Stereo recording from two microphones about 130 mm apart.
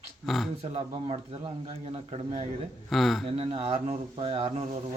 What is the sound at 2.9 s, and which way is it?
Speech, centre (ahead or behind).